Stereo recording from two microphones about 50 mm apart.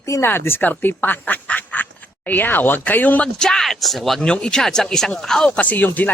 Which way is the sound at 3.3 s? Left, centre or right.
Centre.